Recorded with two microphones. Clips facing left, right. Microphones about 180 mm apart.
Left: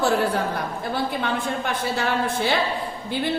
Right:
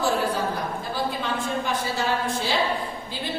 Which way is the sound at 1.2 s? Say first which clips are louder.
Left 2 dB; 60° left (ahead or behind).